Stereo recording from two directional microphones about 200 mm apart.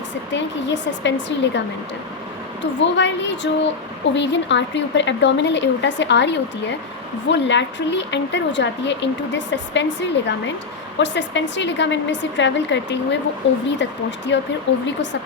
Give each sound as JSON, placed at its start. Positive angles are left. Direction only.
{"t": 0.3, "sound": "a woman's voice", "side_deg": 65}
{"t": 14.3, "sound": "a woman's voice", "side_deg": 65}